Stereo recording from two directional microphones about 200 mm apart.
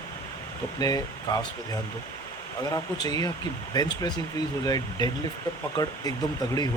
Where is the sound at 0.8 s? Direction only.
20° left (ahead or behind).